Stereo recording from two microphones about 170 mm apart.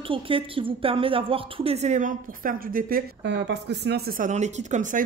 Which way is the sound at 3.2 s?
85° right.